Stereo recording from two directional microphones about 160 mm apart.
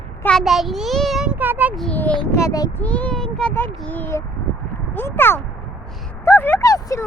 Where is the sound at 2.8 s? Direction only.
10° left (ahead or behind).